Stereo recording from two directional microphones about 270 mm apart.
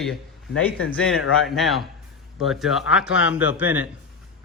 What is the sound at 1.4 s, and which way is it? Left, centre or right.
Speech, centre.